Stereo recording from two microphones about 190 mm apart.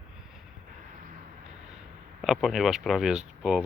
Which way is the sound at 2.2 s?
Centre (ahead or behind).